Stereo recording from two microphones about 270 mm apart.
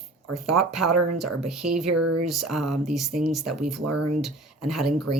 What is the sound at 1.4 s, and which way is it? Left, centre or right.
Speech, centre.